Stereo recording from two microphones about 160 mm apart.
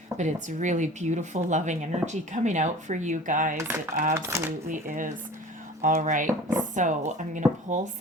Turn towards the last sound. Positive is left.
turn(degrees=-50)  # may be behind; listen again after turning